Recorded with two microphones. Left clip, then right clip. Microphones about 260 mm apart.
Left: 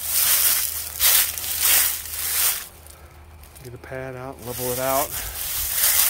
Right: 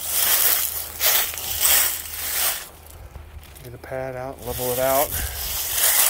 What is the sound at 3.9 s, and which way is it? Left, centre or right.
Speech, centre.